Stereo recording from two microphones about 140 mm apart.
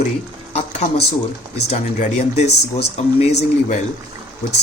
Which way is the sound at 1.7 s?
55° left (ahead or behind).